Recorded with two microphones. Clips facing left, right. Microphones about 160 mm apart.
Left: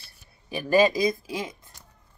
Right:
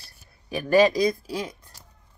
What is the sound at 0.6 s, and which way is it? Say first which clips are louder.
Speech: right 2 dB; 5° left (ahead or behind).